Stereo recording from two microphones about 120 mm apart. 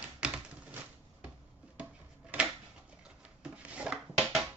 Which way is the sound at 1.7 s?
10° right (ahead or behind).